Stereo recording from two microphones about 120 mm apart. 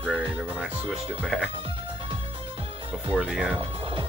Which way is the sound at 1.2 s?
Centre (ahead or behind).